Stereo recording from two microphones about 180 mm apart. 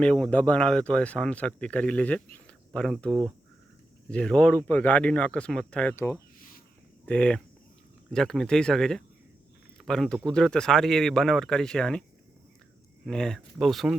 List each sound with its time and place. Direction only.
0.0 s speech: 5° left (ahead or behind)
3.1 s speech: 20° right (ahead or behind)
4.1 s speech: 5° left (ahead or behind)
13.1 s speech: 5° left (ahead or behind)